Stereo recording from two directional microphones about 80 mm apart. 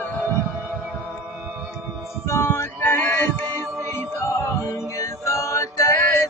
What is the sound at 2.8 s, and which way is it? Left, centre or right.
Music, centre.